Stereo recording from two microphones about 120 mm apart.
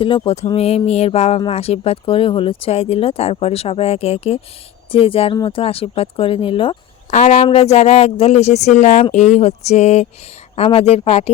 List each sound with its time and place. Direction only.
0.0 s speech: 45° left (ahead or behind)
7.1 s speech: 75° left (ahead or behind)
7.4 s speech: 60° left (ahead or behind)
10.5 s speech: 55° left (ahead or behind)